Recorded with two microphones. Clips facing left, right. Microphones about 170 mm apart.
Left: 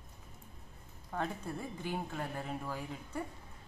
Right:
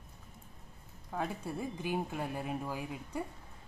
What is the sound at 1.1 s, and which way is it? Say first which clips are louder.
Speech: right 1 dB; 10° right (ahead or behind).